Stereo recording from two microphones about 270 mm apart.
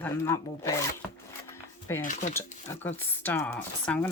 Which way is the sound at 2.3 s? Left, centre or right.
Centre.